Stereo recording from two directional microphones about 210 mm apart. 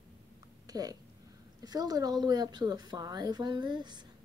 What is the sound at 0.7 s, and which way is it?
A woman's voice, 15° right (ahead or behind).